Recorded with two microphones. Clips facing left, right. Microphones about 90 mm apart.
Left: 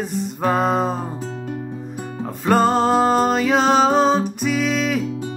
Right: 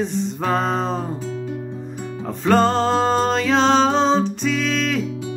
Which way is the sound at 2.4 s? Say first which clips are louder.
Even; 10° left (ahead or behind).